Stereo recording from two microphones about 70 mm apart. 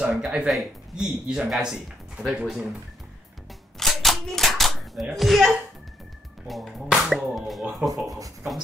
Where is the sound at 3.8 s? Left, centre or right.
Centre.